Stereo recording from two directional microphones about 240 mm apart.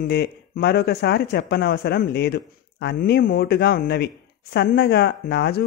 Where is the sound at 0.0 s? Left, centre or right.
Left.